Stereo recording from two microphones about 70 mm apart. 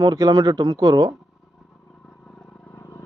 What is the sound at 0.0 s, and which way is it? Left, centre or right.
Speech, right.